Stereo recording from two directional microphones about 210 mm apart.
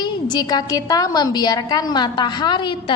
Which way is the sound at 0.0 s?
20° left (ahead or behind).